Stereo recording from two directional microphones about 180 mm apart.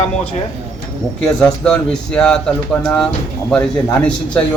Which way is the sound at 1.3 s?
5° left (ahead or behind).